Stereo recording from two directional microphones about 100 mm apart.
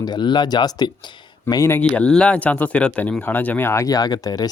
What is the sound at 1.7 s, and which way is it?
Speech, 10° left (ahead or behind).